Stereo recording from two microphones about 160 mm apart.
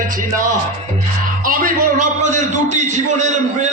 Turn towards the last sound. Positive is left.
turn(degrees=-50)  # may be behind; listen again after turning